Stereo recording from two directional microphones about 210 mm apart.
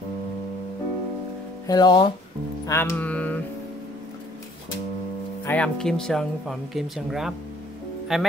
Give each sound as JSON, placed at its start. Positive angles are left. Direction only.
{"t": 1.7, "sound": "speech", "side_deg": 20}
{"t": 2.6, "sound": "music", "side_deg": 15}
{"t": 5.4, "sound": "speech", "side_deg": 5}